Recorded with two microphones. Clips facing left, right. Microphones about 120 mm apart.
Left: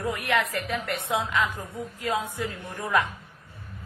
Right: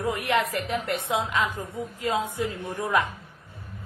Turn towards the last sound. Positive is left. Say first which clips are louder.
# right 1 dB
turn(degrees=-20)  # may be behind; listen again after turning